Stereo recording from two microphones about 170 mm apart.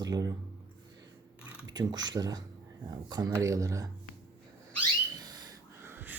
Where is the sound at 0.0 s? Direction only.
25° right (ahead or behind).